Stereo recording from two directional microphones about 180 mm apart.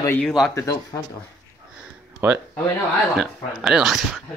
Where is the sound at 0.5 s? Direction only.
20° left (ahead or behind).